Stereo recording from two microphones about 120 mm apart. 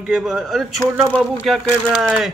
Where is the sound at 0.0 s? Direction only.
5° right (ahead or behind).